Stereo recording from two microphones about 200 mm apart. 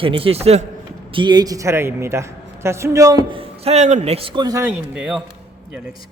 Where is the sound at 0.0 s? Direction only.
25° right (ahead or behind).